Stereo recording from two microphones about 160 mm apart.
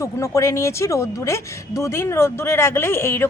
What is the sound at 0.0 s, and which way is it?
Speech, 20° left (ahead or behind).